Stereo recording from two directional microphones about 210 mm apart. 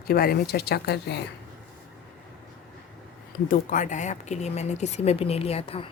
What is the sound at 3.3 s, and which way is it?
Speech, 40° left (ahead or behind).